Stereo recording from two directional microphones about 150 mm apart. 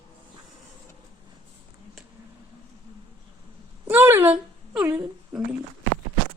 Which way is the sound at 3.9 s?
15° right (ahead or behind).